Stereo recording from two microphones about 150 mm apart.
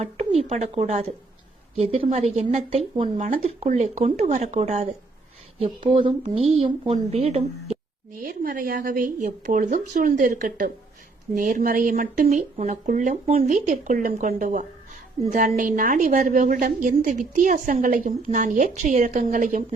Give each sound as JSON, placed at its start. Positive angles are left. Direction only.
{"t": 0.0, "sound": "a woman's voice", "side_deg": -45}
{"t": 3.2, "sound": "a woman's voice", "side_deg": -65}
{"t": 3.4, "sound": "speech", "side_deg": -50}
{"t": 5.9, "sound": "speech", "side_deg": -35}
{"t": 8.2, "sound": "a woman's voice", "side_deg": -75}